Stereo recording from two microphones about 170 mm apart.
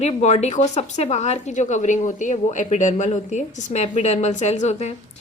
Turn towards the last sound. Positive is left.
turn(degrees=40)  # may be behind; listen again after turning